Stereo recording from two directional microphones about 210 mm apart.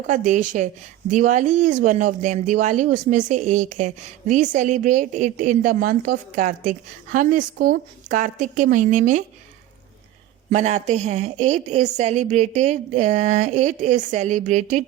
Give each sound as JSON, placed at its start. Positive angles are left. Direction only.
{"t": 0.1, "sound": "speech", "side_deg": -35}
{"t": 10.5, "sound": "speech", "side_deg": -35}